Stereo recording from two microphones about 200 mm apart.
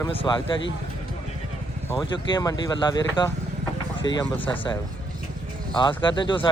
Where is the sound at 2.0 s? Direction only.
20° left (ahead or behind).